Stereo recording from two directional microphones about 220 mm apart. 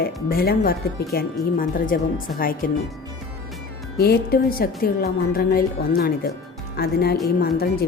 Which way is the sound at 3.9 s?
45° left (ahead or behind).